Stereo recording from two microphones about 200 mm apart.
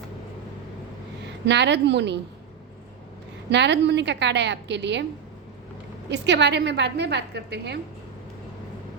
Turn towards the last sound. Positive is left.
turn(degrees=-55)  # may be behind; listen again after turning